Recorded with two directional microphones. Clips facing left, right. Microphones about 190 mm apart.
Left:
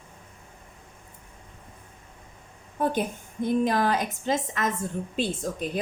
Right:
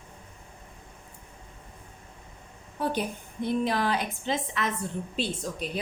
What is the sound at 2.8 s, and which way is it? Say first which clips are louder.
A woman's voice: left 3 dB; 50° left (ahead or behind).